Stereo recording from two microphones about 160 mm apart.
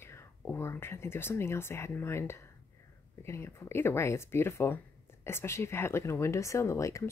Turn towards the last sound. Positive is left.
turn(degrees=20)  # may be behind; listen again after turning